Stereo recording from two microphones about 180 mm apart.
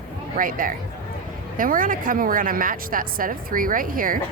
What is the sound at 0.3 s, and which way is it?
A woman's voice, 50° right (ahead or behind).